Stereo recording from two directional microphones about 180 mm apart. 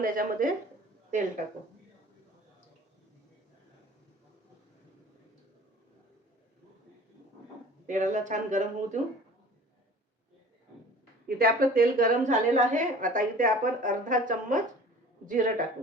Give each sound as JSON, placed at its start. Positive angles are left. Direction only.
{"t": 0.0, "sound": "a woman's voice", "side_deg": -50}
{"t": 7.9, "sound": "a woman's voice", "side_deg": -45}
{"t": 11.3, "sound": "a woman's voice", "side_deg": -55}